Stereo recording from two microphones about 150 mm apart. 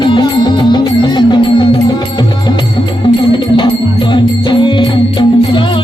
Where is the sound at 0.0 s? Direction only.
30° left (ahead or behind).